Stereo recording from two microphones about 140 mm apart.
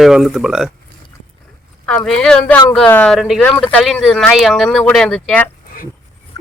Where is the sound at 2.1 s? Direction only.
5° left (ahead or behind).